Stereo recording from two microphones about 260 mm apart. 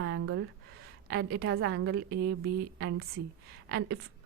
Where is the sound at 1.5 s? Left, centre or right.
Right.